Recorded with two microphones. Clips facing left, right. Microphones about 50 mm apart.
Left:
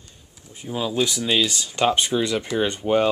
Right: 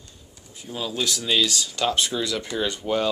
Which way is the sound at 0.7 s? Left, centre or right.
Centre.